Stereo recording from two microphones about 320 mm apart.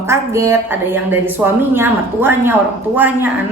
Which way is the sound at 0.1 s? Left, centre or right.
Centre.